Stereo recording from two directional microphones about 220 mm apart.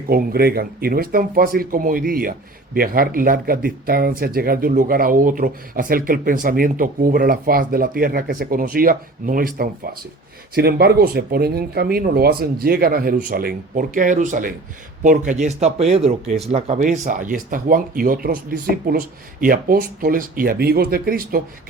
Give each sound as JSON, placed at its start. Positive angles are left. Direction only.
{"t": 0.1, "sound": "speech", "side_deg": -45}